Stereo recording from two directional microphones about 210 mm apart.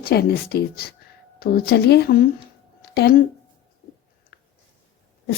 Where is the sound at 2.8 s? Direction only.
50° left (ahead or behind).